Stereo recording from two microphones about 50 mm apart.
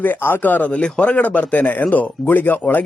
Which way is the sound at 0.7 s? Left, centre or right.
Left.